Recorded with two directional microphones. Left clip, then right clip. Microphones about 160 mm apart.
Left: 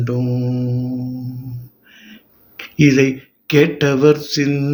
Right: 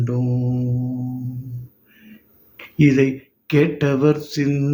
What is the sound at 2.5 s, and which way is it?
Speech, 20° right (ahead or behind).